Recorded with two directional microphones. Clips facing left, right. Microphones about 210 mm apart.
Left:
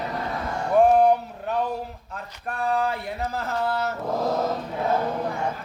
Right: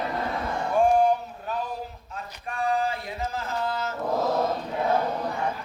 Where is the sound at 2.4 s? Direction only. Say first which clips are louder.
Left 2 dB; 65° left (ahead or behind).